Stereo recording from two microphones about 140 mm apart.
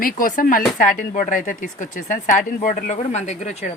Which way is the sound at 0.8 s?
70° left (ahead or behind).